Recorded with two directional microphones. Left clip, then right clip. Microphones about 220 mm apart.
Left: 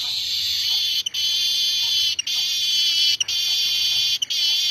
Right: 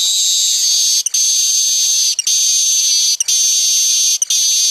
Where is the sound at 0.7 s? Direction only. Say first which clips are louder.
Right 7 dB; 35° right (ahead or behind).